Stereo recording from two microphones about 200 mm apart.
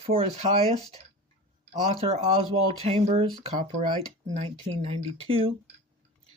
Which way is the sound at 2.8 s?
30° right (ahead or behind).